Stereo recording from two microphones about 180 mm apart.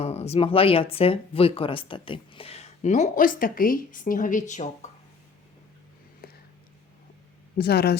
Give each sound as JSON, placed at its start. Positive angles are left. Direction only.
{"t": 0.0, "sound": "speech", "side_deg": 35}
{"t": 6.2, "sound": "a sound", "side_deg": 60}
{"t": 7.6, "sound": "speech", "side_deg": 65}